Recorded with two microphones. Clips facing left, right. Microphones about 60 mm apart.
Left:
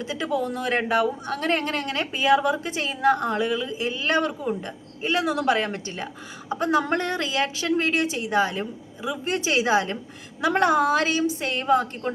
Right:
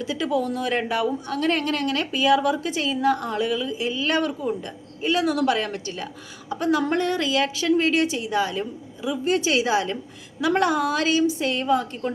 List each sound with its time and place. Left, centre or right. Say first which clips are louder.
0.0 s a woman's voice: right 2 dB; left